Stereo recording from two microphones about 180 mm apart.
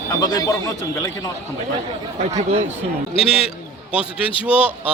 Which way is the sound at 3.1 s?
30° left (ahead or behind).